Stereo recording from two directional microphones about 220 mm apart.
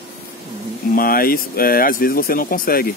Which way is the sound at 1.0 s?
40° left (ahead or behind).